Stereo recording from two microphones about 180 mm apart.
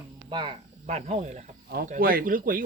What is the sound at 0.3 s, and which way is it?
Speech, 25° right (ahead or behind).